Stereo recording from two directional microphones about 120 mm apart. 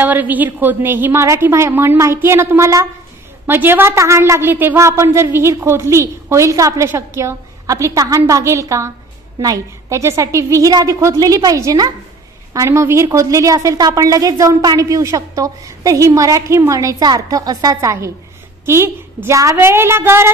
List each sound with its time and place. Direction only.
0.0 s a woman's voice: 15° right (ahead or behind)